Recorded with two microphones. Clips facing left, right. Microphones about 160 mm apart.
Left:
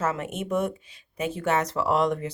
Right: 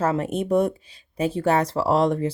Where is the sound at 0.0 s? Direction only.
35° right (ahead or behind).